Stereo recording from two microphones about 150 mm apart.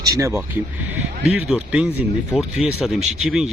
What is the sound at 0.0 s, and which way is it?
Speech, 20° right (ahead or behind).